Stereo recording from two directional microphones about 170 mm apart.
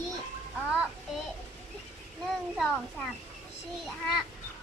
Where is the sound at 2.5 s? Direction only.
Centre (ahead or behind).